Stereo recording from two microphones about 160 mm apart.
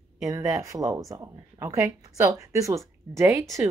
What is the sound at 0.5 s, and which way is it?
Speech, 20° right (ahead or behind).